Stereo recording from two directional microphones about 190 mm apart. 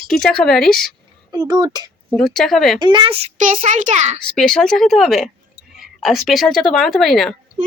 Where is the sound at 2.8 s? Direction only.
25° right (ahead or behind).